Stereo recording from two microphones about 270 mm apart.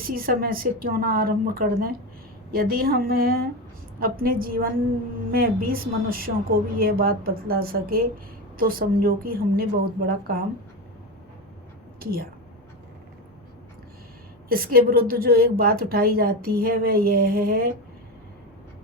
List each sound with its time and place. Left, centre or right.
0.0 s a woman's voice: right
11.9 s a woman's voice: right
14.5 s a woman's voice: right